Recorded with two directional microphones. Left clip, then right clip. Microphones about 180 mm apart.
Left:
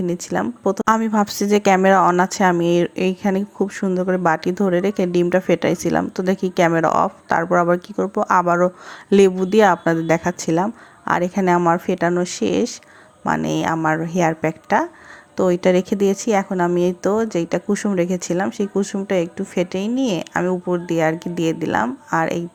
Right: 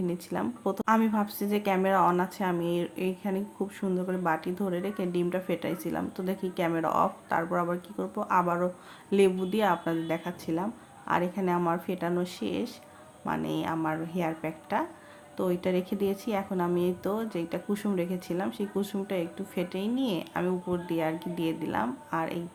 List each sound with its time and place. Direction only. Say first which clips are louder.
0.0 s a woman's voice: left 10 dB; 40° left (ahead or behind)
0.9 s a woman's voice: left 8 dB; 45° left (ahead or behind)